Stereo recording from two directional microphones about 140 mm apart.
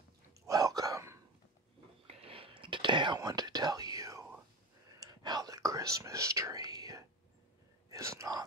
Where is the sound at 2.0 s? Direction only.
45° right (ahead or behind).